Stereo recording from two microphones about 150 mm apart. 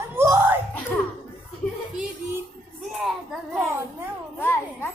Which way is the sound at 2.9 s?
Centre (ahead or behind).